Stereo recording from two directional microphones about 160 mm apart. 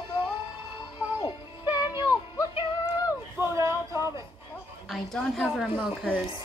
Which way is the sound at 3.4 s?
15° right (ahead or behind).